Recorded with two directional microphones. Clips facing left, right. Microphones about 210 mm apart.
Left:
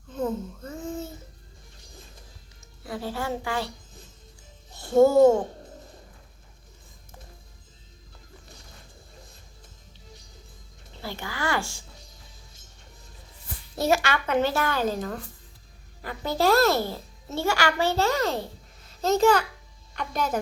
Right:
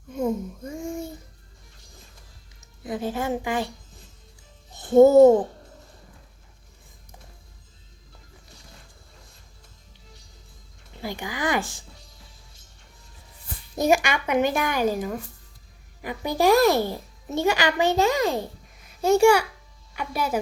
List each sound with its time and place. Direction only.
0.1 s babbling: 10° right (ahead or behind)
2.8 s a child's voice: 20° right (ahead or behind)
4.8 s speech: 20° right (ahead or behind)
10.9 s speech: 15° right (ahead or behind)
13.7 s a child's voice: 15° right (ahead or behind)